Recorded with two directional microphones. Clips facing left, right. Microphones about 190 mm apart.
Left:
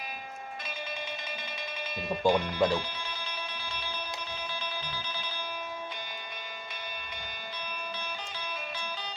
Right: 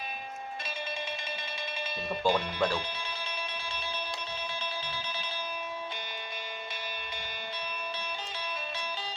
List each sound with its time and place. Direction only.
2.0 s speech: 20° left (ahead or behind)